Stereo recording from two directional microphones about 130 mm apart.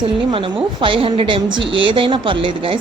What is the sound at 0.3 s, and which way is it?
A woman's voice, 40° right (ahead or behind).